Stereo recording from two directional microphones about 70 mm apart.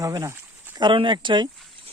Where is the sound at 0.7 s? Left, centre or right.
Right.